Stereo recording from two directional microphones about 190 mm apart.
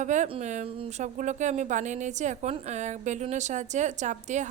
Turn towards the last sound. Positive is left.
turn(degrees=-40)  # may be behind; listen again after turning